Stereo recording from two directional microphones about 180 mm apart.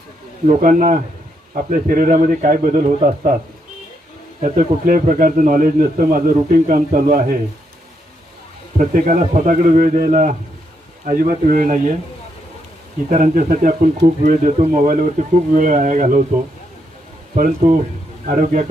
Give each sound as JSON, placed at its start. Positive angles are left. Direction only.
{"t": 0.4, "sound": "a man's voice", "side_deg": -45}
{"t": 4.4, "sound": "a man's voice", "side_deg": -45}
{"t": 8.8, "sound": "a man's voice", "side_deg": -45}
{"t": 13.1, "sound": "a man's voice", "side_deg": -45}
{"t": 17.3, "sound": "a man's voice", "side_deg": -45}